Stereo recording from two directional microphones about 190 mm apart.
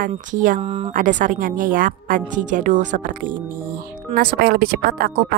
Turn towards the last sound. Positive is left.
turn(degrees=-55)  # may be behind; listen again after turning